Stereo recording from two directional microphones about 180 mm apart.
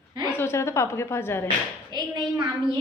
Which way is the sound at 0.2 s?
15° left (ahead or behind).